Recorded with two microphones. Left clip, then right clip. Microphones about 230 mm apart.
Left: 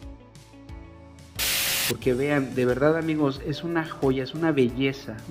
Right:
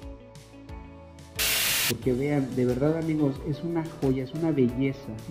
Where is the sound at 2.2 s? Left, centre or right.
Centre.